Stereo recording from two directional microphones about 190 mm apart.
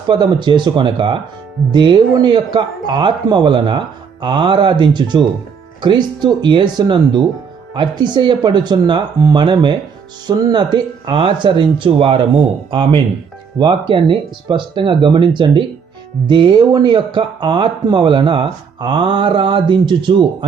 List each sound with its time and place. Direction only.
0.1 s speech: 25° right (ahead or behind)